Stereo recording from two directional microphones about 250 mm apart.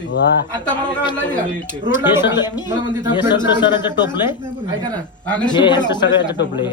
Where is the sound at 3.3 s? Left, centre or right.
Centre.